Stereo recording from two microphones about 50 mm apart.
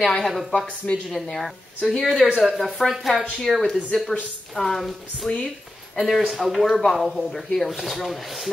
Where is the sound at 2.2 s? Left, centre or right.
Centre.